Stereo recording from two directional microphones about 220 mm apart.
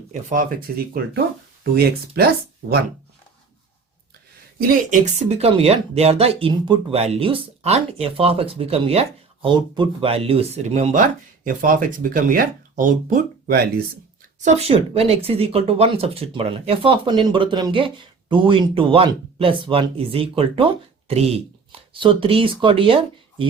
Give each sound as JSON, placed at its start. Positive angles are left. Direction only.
{"t": 0.1, "sound": "speech", "side_deg": -35}
{"t": 1.7, "sound": "speech", "side_deg": -45}
{"t": 4.9, "sound": "a woman's voice", "side_deg": -30}
{"t": 14.4, "sound": "a woman's voice", "side_deg": -25}